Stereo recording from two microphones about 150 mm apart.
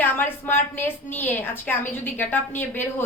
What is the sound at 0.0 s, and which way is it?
A woman's voice, 15° left (ahead or behind).